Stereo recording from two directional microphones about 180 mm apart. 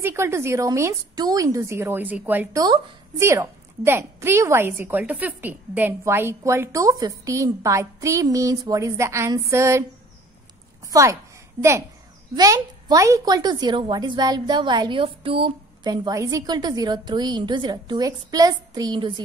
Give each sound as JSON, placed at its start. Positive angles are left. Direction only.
{"t": 0.0, "sound": "a woman's voice", "side_deg": -15}
{"t": 10.9, "sound": "a woman's voice", "side_deg": -15}
{"t": 12.4, "sound": "speech", "side_deg": -20}